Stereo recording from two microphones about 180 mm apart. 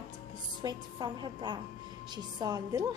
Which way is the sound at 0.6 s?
25° right (ahead or behind).